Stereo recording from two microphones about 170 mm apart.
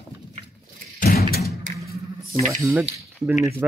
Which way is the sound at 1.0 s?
60° left (ahead or behind).